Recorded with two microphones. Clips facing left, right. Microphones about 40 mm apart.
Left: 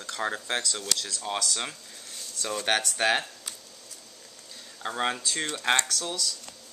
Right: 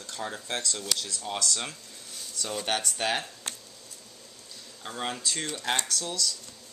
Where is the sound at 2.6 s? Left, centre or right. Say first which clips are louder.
Left 4 dB; left.